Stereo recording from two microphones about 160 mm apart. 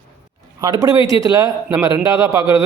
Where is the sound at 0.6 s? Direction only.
25° right (ahead or behind).